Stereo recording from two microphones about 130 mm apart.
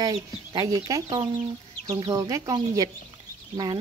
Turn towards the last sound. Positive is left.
turn(degrees=-30)  # may be behind; listen again after turning